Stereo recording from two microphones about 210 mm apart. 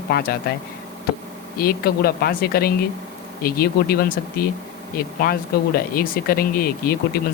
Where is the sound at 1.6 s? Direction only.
45° left (ahead or behind).